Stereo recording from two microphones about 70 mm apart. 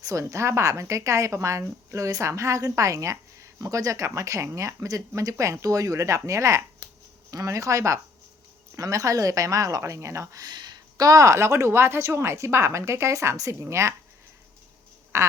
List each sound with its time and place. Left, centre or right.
0.0 s speech: right
10.4 s speech: right
15.1 s speech: right